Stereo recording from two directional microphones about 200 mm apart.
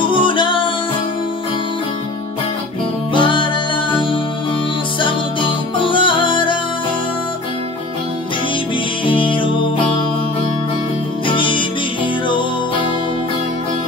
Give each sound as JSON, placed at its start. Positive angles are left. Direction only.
{"t": 0.1, "sound": "music", "side_deg": 25}
{"t": 3.1, "sound": "music", "side_deg": 25}
{"t": 5.0, "sound": "music", "side_deg": 25}
{"t": 9.0, "sound": "music", "side_deg": 25}
{"t": 11.2, "sound": "music", "side_deg": 25}